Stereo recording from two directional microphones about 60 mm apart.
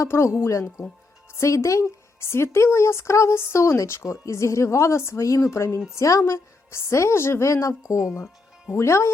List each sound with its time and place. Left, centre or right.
0.0 s speech: left
1.4 s speech: left
5.9 s speech: left